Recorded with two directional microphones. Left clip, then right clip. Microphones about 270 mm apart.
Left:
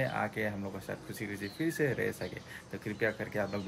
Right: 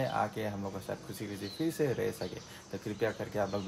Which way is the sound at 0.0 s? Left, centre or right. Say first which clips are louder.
Even; centre.